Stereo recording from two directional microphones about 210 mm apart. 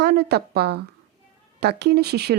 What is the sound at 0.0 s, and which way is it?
A woman's voice, 50° right (ahead or behind).